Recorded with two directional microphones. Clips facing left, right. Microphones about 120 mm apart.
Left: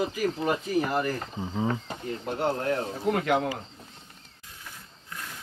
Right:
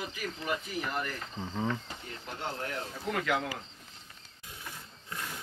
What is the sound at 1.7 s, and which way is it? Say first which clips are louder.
Speech: left 5 dB; 45° left (ahead or behind).